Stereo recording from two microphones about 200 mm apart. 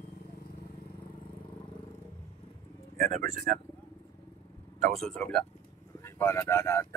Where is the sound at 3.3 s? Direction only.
40° right (ahead or behind).